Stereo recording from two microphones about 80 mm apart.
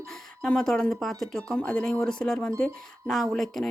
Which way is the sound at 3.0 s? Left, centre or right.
Centre.